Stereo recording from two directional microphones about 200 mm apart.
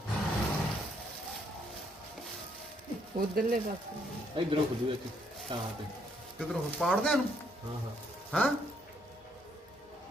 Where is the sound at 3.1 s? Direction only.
45° right (ahead or behind).